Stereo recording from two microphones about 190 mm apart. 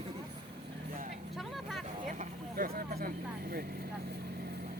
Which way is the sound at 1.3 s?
Centre (ahead or behind).